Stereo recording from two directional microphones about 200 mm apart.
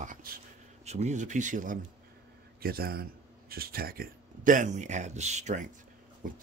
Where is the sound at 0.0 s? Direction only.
45° right (ahead or behind).